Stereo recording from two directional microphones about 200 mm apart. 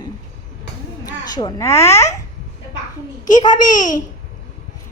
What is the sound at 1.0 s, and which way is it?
Speech, 20° left (ahead or behind).